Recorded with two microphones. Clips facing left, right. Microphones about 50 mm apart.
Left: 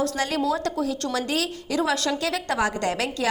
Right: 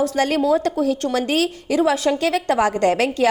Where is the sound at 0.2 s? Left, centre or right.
Right.